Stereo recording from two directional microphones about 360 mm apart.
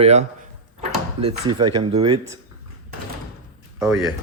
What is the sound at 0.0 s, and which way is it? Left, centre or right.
Speech, centre.